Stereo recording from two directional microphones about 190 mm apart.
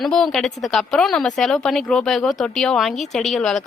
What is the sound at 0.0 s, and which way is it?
A woman's voice, 5° left (ahead or behind).